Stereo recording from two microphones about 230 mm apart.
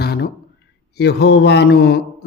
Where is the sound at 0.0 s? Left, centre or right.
Left.